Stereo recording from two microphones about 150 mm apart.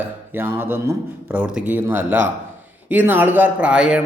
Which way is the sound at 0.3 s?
15° right (ahead or behind).